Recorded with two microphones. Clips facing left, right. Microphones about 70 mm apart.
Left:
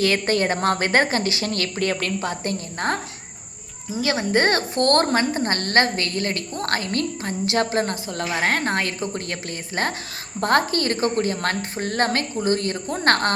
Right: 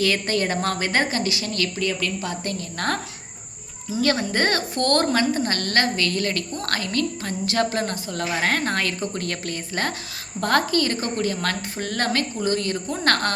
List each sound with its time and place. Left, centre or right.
0.0 s a woman's voice: left
4.0 s a woman's voice: left